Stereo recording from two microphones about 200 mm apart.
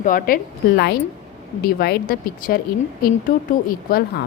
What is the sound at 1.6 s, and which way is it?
A woman's voice, 50° left (ahead or behind).